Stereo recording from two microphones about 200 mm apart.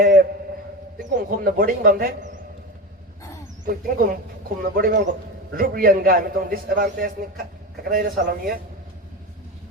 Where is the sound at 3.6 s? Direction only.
45° right (ahead or behind).